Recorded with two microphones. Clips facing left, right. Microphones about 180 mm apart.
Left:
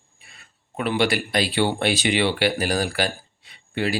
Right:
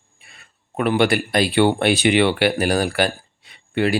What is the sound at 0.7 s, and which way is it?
Speech, 55° right (ahead or behind).